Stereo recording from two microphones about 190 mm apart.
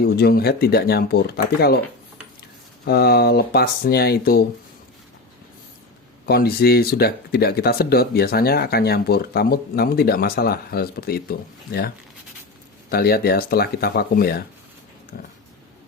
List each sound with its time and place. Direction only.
0.0 s speech: 55° left (ahead or behind)
2.8 s speech: 55° left (ahead or behind)
6.2 s speech: 55° left (ahead or behind)
12.9 s speech: 55° left (ahead or behind)